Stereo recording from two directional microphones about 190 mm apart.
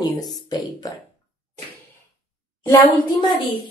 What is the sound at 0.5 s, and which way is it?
Speech, 20° left (ahead or behind).